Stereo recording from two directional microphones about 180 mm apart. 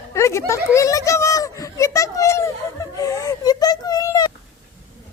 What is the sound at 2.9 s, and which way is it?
Whimper, 20° left (ahead or behind).